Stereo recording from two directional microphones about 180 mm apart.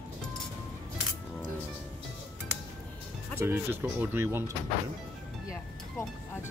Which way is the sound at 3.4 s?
15° right (ahead or behind).